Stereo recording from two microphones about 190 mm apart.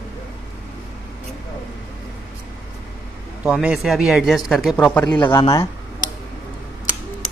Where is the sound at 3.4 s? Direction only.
5° right (ahead or behind).